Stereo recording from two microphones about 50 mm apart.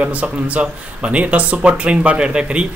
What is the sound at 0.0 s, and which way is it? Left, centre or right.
Speech, right.